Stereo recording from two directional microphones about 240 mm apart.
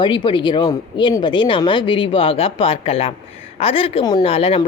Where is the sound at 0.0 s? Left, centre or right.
Left.